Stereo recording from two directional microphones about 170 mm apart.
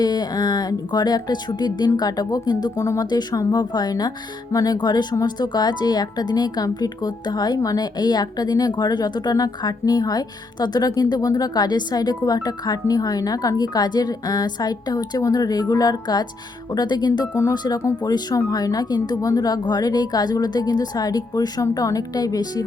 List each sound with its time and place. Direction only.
0.0 s a woman's voice: 25° left (ahead or behind)